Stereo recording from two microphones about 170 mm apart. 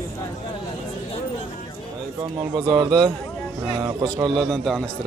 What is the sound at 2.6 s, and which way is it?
Speech, 25° right (ahead or behind).